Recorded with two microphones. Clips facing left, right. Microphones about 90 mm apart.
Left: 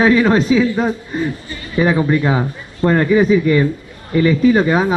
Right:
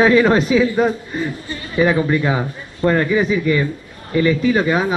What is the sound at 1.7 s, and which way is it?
A man's voice, 5° left (ahead or behind).